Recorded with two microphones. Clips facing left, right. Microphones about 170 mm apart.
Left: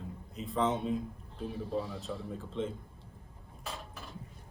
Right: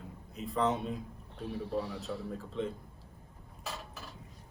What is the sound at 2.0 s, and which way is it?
Speech, centre (ahead or behind).